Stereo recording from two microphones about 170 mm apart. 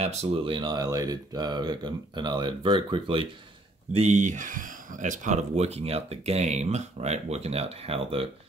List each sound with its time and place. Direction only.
0.0 s speech: 40° right (ahead or behind)
3.9 s speech: 40° right (ahead or behind)